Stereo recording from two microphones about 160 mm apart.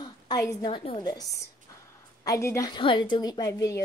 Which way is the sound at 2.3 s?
20° left (ahead or behind).